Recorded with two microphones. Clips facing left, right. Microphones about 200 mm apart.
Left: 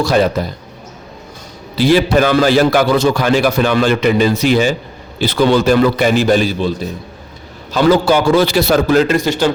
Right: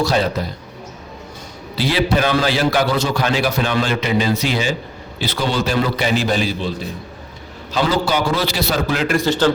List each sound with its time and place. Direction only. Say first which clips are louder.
0.0 s a man's voice: left 5 dB; 50° left (ahead or behind)
1.7 s a man's voice: left 7 dB; 45° left (ahead or behind)
7.7 s a man's voice: left 7 dB; 50° left (ahead or behind)
9.0 s a man's voice: left 2 dB; 15° left (ahead or behind)